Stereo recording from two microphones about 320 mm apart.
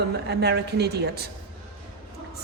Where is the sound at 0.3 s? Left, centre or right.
Right.